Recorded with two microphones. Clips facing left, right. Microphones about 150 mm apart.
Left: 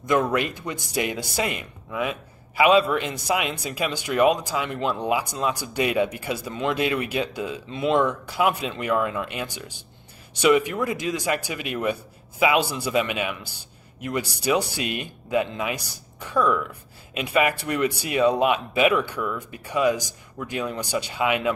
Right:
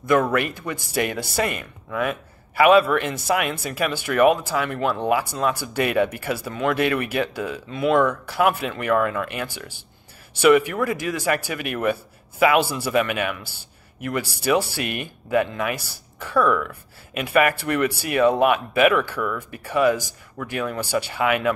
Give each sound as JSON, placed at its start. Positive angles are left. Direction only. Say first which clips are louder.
{"t": 0.0, "sound": "speech", "louder": "right 2 dB", "side_deg": 20}